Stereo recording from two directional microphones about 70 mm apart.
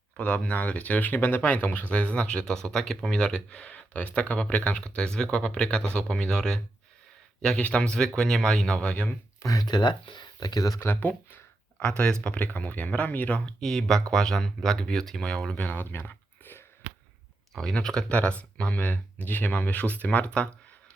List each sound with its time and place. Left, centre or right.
0.2 s speech: centre
9.4 s speech: left
9.6 s speech: left
10.8 s speech: left
11.8 s speech: centre
13.6 s speech: centre
15.5 s a sound: left
17.5 s speech: centre